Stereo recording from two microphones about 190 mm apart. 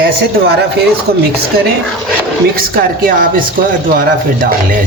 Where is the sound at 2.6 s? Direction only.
50° right (ahead or behind).